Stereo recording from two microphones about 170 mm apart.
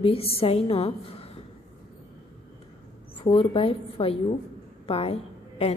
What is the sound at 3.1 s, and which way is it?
A woman's voice, 35° left (ahead or behind).